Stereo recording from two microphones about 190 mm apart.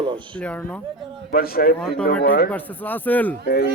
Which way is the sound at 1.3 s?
50° left (ahead or behind).